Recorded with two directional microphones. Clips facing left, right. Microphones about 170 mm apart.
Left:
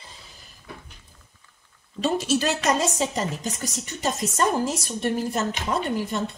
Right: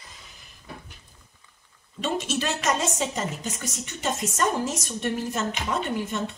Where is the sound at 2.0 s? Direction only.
35° left (ahead or behind).